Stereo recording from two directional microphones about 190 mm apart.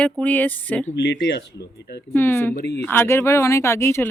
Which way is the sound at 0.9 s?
65° left (ahead or behind).